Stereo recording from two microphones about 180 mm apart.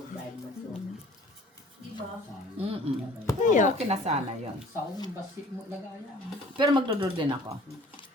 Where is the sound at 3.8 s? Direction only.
35° right (ahead or behind).